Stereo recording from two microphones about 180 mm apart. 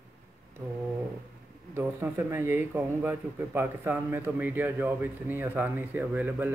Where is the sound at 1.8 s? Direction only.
15° right (ahead or behind).